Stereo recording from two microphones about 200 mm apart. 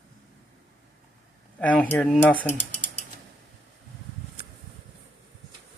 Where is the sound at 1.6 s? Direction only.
5° left (ahead or behind).